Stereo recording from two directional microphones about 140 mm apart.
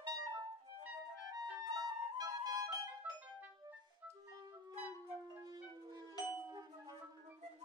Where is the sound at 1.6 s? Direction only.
30° right (ahead or behind).